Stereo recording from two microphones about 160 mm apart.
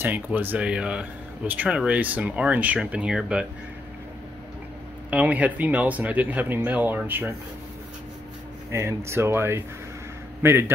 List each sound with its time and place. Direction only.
0.0 s speech: 10° right (ahead or behind)
5.1 s speech: 10° right (ahead or behind)
8.7 s speech: 15° right (ahead or behind)